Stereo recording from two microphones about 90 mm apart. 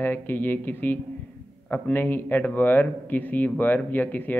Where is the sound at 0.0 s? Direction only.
20° left (ahead or behind).